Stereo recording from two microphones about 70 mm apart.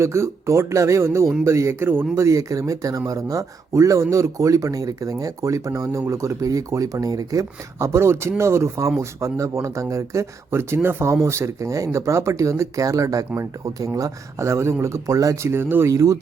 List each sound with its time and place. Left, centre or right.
0.0 s speech: right
2.1 s speech: right
15.4 s speech: right
15.9 s speech: right